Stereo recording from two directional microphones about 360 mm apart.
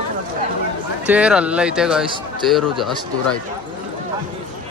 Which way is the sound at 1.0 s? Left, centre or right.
Centre.